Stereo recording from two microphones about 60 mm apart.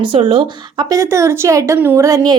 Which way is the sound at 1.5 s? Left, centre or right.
Right.